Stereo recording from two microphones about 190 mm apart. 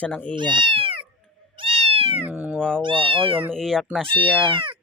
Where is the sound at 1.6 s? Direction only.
30° right (ahead or behind).